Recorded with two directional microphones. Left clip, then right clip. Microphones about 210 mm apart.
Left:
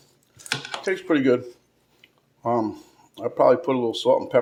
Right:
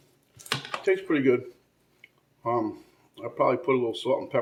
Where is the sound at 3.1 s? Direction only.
45° left (ahead or behind).